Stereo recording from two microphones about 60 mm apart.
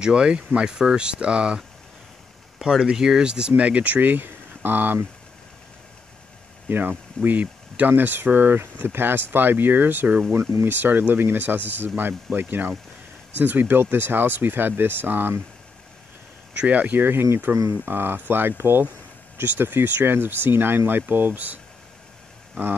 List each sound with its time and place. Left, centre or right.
0.0 s speech: centre
2.7 s speech: centre; by 5.0 s right
6.7 s speech: right
16.5 s speech: right